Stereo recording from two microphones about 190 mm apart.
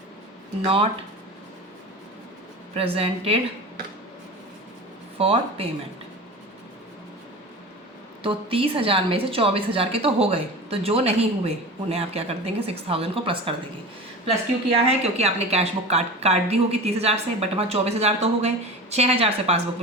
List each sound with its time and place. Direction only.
0.6 s a woman's voice: 30° right (ahead or behind)
2.7 s a woman's voice: 30° right (ahead or behind)
5.1 s a woman's voice: 30° right (ahead or behind)
8.2 s a woman's voice: 30° right (ahead or behind)
15.0 s a woman's voice: 35° right (ahead or behind)